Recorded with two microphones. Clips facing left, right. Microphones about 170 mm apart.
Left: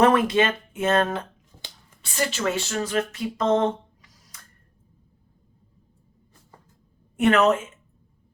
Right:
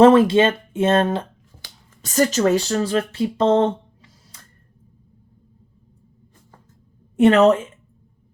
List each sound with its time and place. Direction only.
0.0 s speech: 30° right (ahead or behind)
2.0 s speech: 40° right (ahead or behind)
7.2 s a woman's voice: 30° right (ahead or behind)